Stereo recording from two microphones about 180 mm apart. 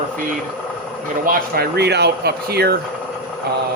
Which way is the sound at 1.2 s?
55° right (ahead or behind).